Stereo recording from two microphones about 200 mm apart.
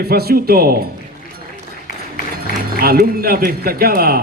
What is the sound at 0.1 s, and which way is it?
Speech, 50° right (ahead or behind).